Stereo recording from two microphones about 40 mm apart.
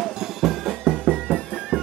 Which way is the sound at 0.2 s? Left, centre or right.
Centre.